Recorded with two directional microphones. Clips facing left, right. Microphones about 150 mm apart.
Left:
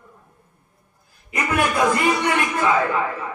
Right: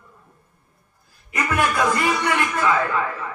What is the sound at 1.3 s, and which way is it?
A man's voice, 20° left (ahead or behind).